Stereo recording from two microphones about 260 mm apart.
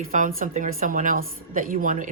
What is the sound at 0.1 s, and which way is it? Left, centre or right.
A woman's voice, right.